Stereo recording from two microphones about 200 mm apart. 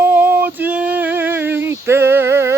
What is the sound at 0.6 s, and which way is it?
Female singing, 5° right (ahead or behind).